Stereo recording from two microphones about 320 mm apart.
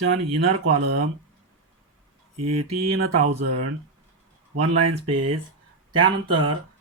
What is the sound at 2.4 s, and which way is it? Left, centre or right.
Speech, right.